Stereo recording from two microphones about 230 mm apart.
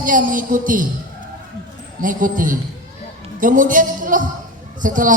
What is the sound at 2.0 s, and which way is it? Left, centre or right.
A man's voice, right.